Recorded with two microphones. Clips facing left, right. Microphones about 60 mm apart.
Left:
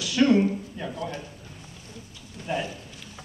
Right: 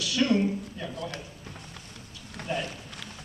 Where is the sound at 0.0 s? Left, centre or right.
Left.